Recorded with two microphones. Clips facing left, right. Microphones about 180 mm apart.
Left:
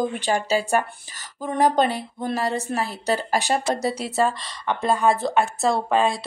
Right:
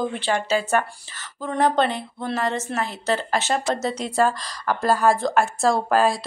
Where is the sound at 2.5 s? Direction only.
35° left (ahead or behind).